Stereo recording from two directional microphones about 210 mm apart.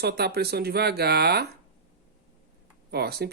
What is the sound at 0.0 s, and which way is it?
Speech, 50° right (ahead or behind).